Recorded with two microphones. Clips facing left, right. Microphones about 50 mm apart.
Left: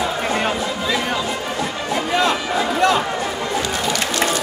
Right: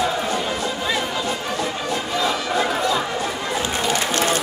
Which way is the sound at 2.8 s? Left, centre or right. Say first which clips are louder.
Left 5 dB; left.